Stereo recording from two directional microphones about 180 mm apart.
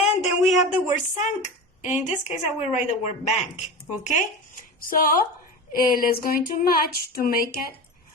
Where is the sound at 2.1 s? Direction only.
35° left (ahead or behind).